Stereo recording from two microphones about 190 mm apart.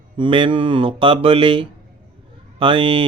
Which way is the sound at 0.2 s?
25° right (ahead or behind).